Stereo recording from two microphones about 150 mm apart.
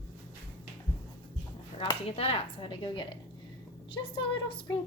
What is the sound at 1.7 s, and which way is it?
Speech, 40° left (ahead or behind).